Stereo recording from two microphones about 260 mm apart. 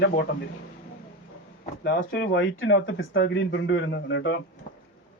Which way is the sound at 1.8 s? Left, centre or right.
Left.